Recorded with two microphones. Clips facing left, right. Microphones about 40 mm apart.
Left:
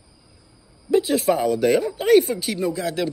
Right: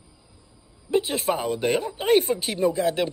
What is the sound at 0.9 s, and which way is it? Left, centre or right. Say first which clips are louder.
Speech: left 5 dB; right.